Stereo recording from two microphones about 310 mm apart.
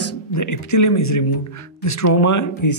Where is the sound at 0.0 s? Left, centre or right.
Left.